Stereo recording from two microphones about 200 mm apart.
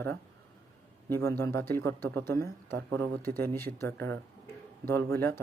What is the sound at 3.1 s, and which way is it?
Speech, 45° right (ahead or behind).